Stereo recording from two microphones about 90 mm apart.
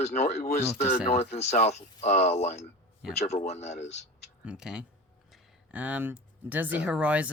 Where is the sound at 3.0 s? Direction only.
5° right (ahead or behind).